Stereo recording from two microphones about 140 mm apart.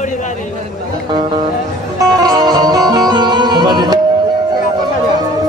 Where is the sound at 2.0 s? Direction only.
25° right (ahead or behind).